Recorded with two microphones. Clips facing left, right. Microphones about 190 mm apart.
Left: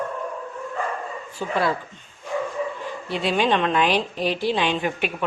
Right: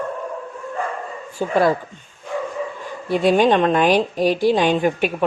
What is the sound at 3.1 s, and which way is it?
A woman's voice, 45° right (ahead or behind).